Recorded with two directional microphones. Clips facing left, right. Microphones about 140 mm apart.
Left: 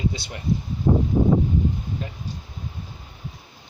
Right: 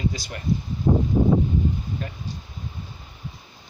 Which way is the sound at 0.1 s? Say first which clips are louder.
Even; 20° left (ahead or behind).